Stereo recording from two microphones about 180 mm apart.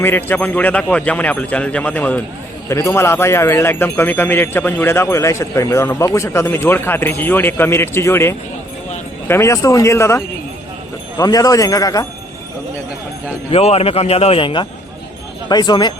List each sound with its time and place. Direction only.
0.0 s speech: 10° left (ahead or behind)
11.2 s speech: 20° left (ahead or behind)
13.5 s a man's voice: 35° left (ahead or behind)